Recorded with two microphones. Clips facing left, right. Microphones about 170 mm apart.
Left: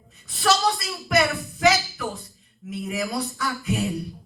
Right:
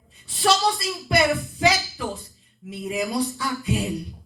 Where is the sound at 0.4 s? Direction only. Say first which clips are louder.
Right 1 dB; 30° right (ahead or behind).